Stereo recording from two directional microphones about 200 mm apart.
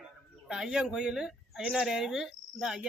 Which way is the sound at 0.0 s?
5° right (ahead or behind).